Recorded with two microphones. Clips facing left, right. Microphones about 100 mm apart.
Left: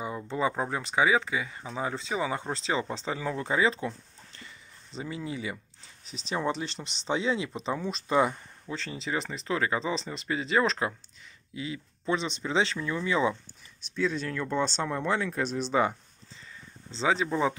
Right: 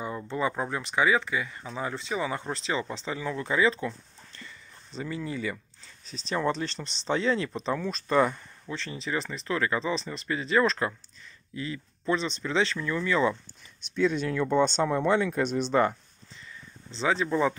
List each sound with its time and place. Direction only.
0.4 s speech: 20° left (ahead or behind)
13.9 s speech: 5° right (ahead or behind)
16.9 s speech: 25° left (ahead or behind)